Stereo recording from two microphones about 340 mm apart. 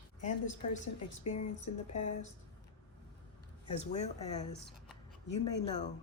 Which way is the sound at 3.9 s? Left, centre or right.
Centre.